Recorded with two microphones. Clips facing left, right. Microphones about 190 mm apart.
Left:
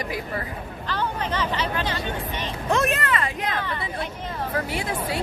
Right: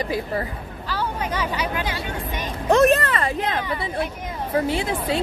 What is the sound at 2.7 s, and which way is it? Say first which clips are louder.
Speech: right 7 dB; 40° right (ahead or behind).